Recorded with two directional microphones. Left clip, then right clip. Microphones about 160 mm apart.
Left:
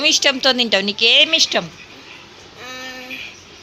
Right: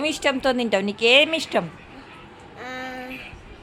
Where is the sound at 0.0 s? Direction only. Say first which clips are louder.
Left 7 dB; centre (ahead or behind).